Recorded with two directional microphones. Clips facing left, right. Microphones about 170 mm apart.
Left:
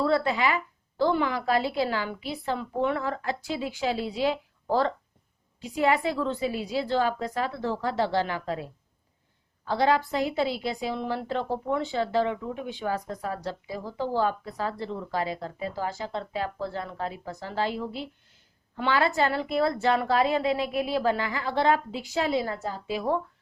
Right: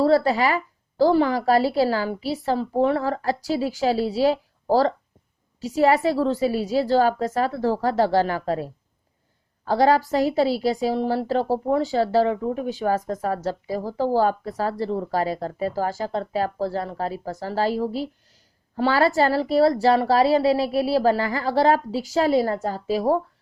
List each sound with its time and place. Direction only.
0.0 s a woman's voice: 40° right (ahead or behind)